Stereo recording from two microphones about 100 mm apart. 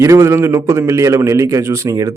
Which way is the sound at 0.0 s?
30° right (ahead or behind).